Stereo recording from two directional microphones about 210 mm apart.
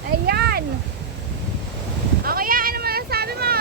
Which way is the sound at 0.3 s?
50° right (ahead or behind).